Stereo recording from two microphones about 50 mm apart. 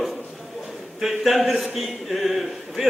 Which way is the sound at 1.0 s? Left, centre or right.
Centre.